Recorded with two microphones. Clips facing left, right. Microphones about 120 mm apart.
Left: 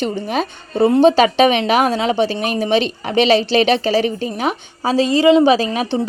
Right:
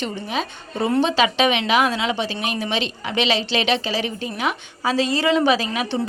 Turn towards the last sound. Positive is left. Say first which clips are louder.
# left 6 dB
turn(degrees=35)  # may be behind; listen again after turning